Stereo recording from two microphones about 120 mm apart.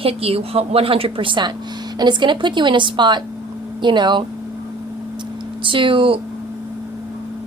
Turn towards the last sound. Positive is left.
turn(degrees=-45)  # may be behind; listen again after turning